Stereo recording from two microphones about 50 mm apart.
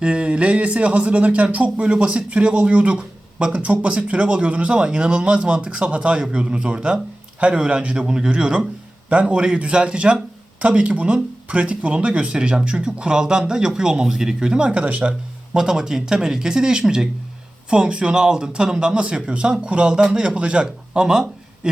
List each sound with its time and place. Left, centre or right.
0.0 s speech: right
15.5 s a man's voice: centre